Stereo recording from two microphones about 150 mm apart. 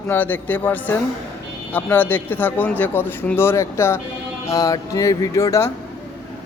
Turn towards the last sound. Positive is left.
turn(degrees=20)  # may be behind; listen again after turning